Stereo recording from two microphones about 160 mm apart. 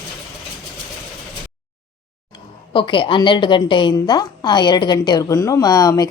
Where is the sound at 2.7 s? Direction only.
30° left (ahead or behind).